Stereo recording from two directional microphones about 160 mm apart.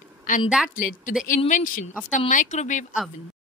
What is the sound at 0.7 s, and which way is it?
Speech, 60° left (ahead or behind).